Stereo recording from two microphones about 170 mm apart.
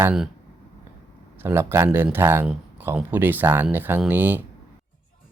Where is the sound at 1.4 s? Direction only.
15° right (ahead or behind).